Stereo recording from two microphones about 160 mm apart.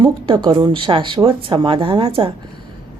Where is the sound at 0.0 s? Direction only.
30° right (ahead or behind).